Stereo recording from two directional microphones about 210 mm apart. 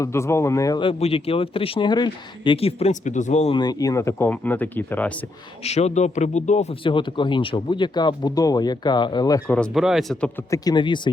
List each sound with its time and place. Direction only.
0.0 s speech: 15° left (ahead or behind)
5.6 s speech: 30° left (ahead or behind)
9.5 s speech: 5° left (ahead or behind); by 11.1 s 20° left (ahead or behind)